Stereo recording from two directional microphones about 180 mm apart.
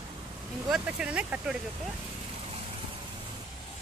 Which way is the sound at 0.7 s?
5° right (ahead or behind).